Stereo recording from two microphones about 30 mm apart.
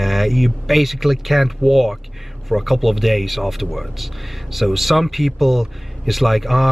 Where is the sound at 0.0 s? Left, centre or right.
Centre.